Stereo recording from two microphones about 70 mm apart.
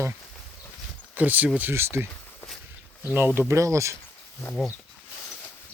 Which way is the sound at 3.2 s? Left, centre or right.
Right.